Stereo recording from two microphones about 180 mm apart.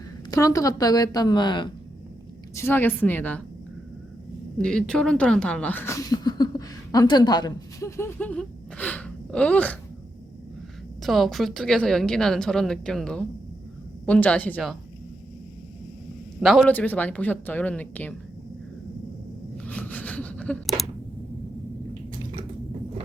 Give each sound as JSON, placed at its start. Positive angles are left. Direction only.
{"t": 0.3, "sound": "a woman's voice", "side_deg": 20}
{"t": 2.6, "sound": "speech", "side_deg": 10}
{"t": 4.5, "sound": "speech", "side_deg": 5}
{"t": 11.0, "sound": "a woman's voice", "side_deg": 0}
{"t": 16.4, "sound": "speech", "side_deg": 0}
{"t": 19.6, "sound": "a sound", "side_deg": 10}